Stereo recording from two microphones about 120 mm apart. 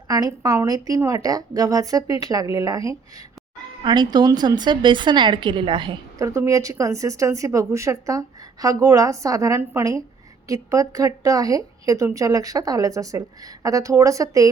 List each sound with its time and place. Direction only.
0.1 s speech: 30° right (ahead or behind)
6.1 s speech: 25° right (ahead or behind)